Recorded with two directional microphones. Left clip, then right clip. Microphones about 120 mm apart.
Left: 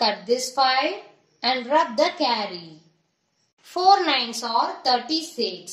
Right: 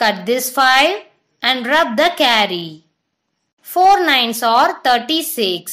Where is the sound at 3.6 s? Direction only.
65° right (ahead or behind).